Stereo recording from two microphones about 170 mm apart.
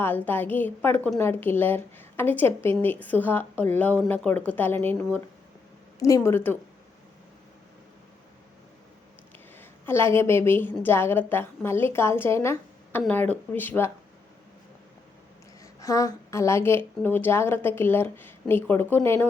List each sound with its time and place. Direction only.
0.0 s a woman's voice: 10° left (ahead or behind)
9.6 s a woman's voice: 15° left (ahead or behind)
15.6 s a woman's voice: 20° left (ahead or behind)